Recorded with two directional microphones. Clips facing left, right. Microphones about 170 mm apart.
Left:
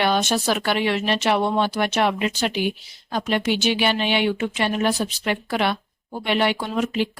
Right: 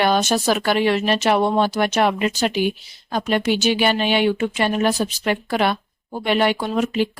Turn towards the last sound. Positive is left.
turn(degrees=-45)  # may be behind; listen again after turning